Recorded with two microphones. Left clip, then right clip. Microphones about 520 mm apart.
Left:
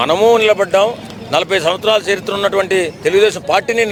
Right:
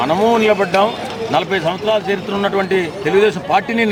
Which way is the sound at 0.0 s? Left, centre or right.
Left.